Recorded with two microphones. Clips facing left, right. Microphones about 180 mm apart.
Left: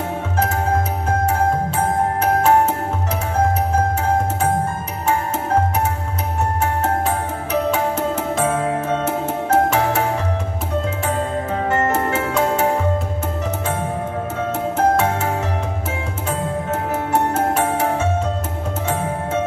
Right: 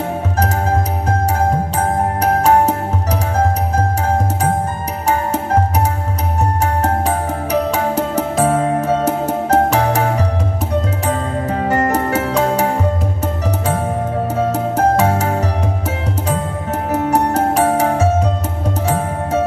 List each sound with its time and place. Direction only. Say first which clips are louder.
7.7 s music: right 3 dB; 40° right (ahead or behind)
11.7 s music: right 3 dB; 40° right (ahead or behind)
14.5 s music: left 1 dB; 40° right (ahead or behind)
16.9 s music: right 5 dB; 40° right (ahead or behind)